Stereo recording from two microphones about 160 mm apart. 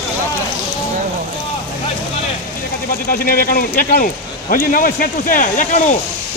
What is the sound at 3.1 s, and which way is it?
A man's voice, 65° left (ahead or behind).